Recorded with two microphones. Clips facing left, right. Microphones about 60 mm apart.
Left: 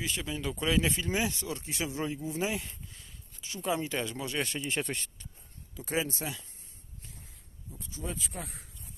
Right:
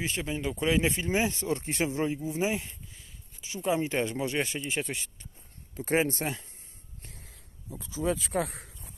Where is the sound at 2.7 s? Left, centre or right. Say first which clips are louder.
Even; centre.